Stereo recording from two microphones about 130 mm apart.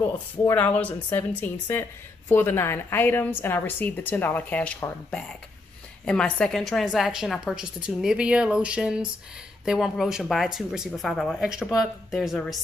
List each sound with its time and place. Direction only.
0.5 s a woman's voice: 15° left (ahead or behind)